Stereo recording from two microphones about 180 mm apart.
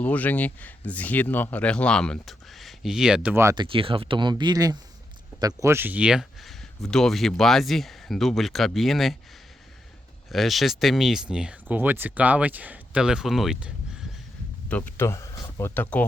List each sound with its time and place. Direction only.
0.0 s speech: 10° left (ahead or behind); by 3.5 s 10° right (ahead or behind)
3.5 s speech: 25° right (ahead or behind); by 9.1 s centre (ahead or behind)
10.3 s speech: centre (ahead or behind)
14.7 s speech: 10° left (ahead or behind)